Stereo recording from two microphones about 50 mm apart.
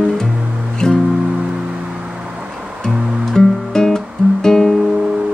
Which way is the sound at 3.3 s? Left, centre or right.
Centre.